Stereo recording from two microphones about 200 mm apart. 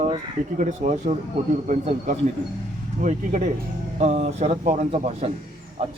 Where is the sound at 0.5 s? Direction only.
40° right (ahead or behind).